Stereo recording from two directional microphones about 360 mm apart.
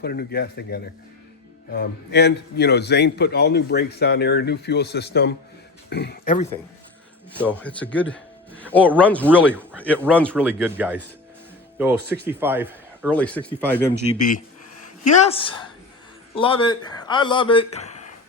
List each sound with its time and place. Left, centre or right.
0.0 s a man's voice: left
7.3 s a man's voice: centre
14.2 s a man's voice: left